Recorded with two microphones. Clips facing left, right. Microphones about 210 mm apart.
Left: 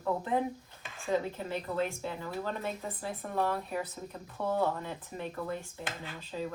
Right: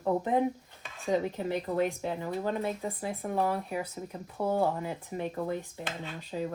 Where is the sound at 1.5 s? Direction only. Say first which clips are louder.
Right 5 dB; 15° right (ahead or behind).